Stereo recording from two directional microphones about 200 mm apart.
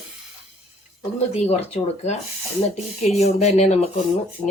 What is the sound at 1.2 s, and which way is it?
Speech, 30° left (ahead or behind).